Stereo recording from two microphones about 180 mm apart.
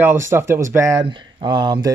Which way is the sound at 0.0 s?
15° right (ahead or behind).